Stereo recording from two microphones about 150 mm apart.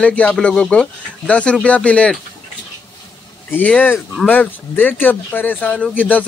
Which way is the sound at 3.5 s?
10° left (ahead or behind).